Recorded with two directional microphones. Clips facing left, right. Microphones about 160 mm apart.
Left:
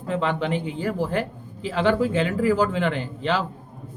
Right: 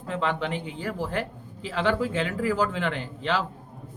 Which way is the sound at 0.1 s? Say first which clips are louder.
Left 4 dB; 15° left (ahead or behind).